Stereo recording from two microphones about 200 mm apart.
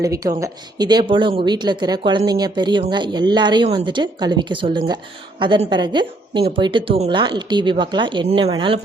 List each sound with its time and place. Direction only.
0.0 s a woman's voice: 15° right (ahead or behind)